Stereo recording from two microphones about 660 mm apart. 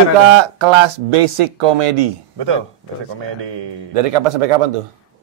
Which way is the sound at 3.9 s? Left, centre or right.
Right.